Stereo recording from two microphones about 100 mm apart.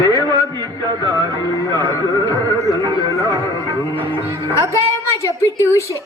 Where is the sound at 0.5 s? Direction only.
45° right (ahead or behind).